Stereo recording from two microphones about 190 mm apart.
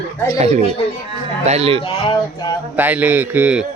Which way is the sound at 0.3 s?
35° right (ahead or behind).